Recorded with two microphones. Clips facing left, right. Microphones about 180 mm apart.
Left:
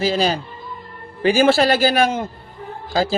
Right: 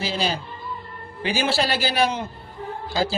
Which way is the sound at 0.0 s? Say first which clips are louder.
Left 7 dB; 45° left (ahead or behind).